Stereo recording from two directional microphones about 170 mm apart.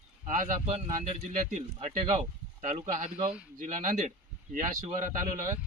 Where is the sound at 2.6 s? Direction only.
40° right (ahead or behind).